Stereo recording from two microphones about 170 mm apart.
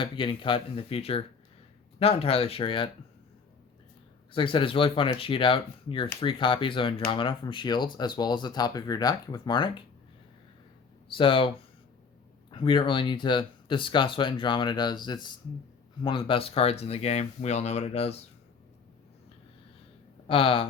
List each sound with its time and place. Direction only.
0.0 s speech: 30° left (ahead or behind)
4.3 s speech: 30° left (ahead or behind)
11.1 s speech: 30° left (ahead or behind)
20.2 s speech: 30° left (ahead or behind)